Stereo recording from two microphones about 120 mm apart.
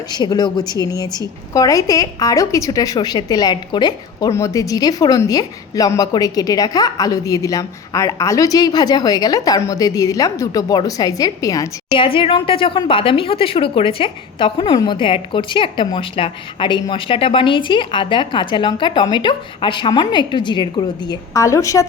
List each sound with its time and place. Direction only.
0.1 s a woman's voice: 35° left (ahead or behind)
11.9 s a woman's voice: 45° left (ahead or behind); by 21.8 s 25° left (ahead or behind)